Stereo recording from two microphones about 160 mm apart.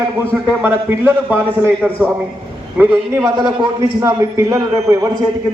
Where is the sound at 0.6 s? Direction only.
15° right (ahead or behind).